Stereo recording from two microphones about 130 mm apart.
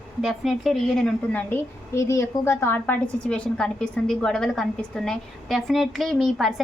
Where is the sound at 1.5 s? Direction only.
20° left (ahead or behind); by 6.5 s centre (ahead or behind).